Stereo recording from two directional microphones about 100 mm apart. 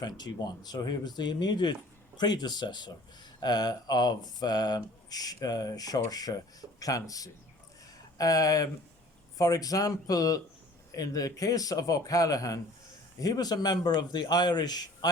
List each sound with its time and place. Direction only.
0.0 s a man's voice: 45° left (ahead or behind)